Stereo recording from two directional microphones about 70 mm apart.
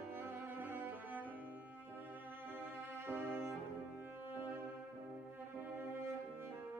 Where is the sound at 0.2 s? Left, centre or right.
Right.